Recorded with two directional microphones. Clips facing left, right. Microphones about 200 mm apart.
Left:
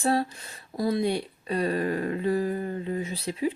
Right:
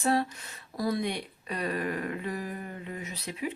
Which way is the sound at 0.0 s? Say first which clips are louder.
Left 2 dB; 30° left (ahead or behind).